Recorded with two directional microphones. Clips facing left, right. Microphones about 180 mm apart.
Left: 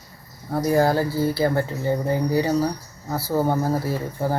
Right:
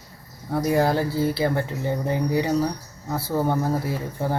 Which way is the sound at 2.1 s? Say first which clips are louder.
Even; 20° right (ahead or behind).